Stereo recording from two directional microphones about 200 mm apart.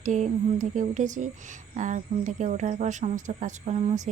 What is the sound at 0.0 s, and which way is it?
Speech, 40° right (ahead or behind).